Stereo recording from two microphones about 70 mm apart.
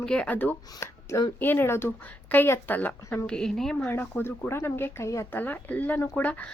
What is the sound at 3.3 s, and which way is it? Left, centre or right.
Speech, centre.